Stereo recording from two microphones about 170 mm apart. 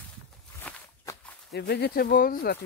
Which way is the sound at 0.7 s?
5° left (ahead or behind).